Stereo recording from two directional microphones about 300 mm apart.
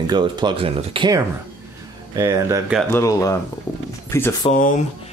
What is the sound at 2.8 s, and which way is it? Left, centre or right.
Speech, centre.